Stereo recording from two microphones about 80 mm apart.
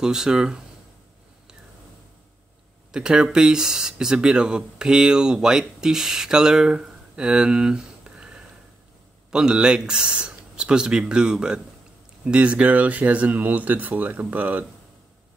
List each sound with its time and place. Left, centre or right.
0.0 s speech: centre
2.9 s speech: centre